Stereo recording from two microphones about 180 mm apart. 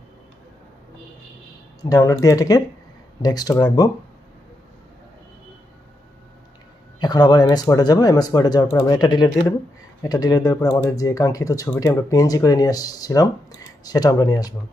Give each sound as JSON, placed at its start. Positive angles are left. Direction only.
{"t": 1.8, "sound": "speech", "side_deg": 20}
{"t": 7.0, "sound": "speech", "side_deg": 25}